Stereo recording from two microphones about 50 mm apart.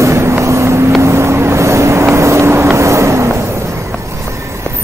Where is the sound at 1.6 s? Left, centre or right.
Right.